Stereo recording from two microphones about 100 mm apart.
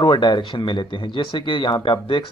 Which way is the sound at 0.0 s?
50° left (ahead or behind).